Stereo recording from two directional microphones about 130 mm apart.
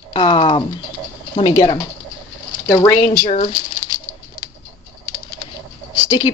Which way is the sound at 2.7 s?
30° left (ahead or behind).